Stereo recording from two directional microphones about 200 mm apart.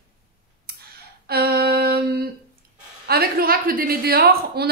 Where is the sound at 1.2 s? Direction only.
50° right (ahead or behind).